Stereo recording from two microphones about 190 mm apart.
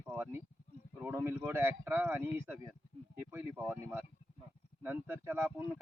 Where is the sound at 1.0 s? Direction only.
10° right (ahead or behind).